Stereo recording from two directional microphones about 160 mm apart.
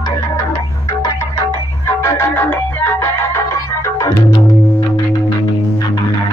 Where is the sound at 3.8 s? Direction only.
20° left (ahead or behind).